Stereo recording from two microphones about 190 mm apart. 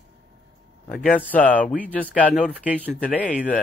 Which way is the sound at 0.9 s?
50° left (ahead or behind).